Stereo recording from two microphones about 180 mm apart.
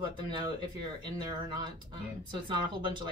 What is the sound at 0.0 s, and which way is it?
Speech, 25° right (ahead or behind).